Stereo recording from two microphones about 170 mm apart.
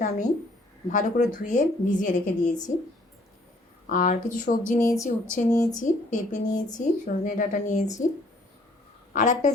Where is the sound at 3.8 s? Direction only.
55° left (ahead or behind).